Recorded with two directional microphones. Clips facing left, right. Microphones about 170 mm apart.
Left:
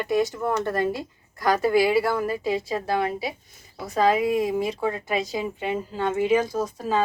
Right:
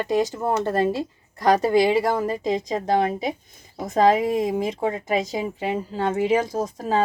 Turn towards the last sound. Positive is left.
turn(degrees=-45)  # may be behind; listen again after turning